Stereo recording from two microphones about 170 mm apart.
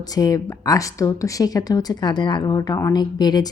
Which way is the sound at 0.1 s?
20° left (ahead or behind).